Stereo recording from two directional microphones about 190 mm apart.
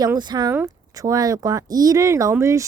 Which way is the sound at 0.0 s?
20° right (ahead or behind).